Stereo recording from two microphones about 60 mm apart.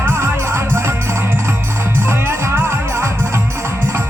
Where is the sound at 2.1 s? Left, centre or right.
Right.